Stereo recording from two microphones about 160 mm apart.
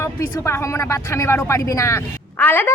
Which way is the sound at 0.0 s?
15° left (ahead or behind).